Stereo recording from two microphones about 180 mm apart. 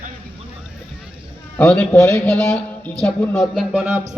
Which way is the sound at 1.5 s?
5° left (ahead or behind).